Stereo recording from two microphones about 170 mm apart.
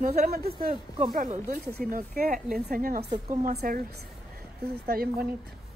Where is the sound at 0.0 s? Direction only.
65° right (ahead or behind).